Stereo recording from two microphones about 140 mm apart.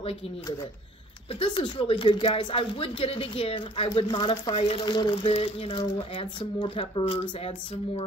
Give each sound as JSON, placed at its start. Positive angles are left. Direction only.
{"t": 1.4, "sound": "speech", "side_deg": 40}